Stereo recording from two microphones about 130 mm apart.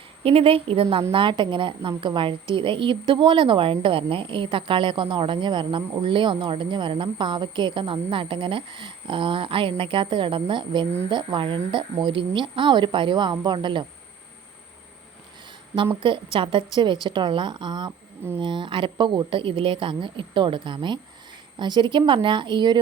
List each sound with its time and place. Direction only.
0.2 s a woman's voice: 45° right (ahead or behind)
16.0 s a woman's voice: 40° right (ahead or behind)